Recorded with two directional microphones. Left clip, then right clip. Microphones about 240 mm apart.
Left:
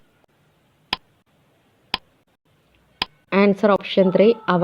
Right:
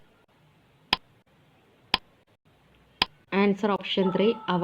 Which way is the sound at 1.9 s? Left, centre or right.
Centre.